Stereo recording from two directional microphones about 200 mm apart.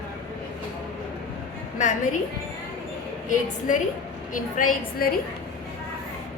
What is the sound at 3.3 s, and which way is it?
A woman's voice, 40° left (ahead or behind).